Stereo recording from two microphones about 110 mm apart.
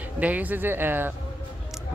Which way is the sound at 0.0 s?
15° right (ahead or behind).